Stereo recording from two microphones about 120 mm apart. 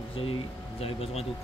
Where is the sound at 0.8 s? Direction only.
55° left (ahead or behind).